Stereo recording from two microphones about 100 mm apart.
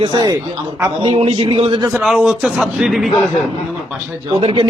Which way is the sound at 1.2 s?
70° right (ahead or behind).